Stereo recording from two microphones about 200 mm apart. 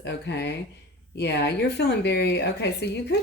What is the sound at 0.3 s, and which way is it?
A woman's voice, 55° left (ahead or behind).